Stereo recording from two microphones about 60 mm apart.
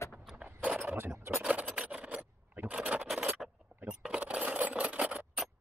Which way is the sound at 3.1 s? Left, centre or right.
Centre.